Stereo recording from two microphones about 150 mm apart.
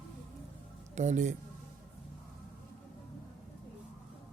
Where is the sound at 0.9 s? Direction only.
50° right (ahead or behind).